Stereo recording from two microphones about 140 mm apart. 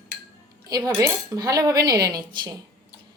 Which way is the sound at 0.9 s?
20° right (ahead or behind).